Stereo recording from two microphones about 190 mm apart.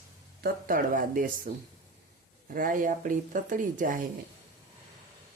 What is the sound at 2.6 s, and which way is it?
Speech, 45° right (ahead or behind).